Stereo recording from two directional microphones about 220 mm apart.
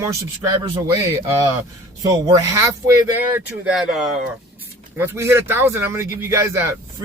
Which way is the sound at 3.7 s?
5° right (ahead or behind).